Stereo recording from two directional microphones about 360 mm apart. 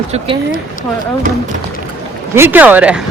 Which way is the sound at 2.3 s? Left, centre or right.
Centre.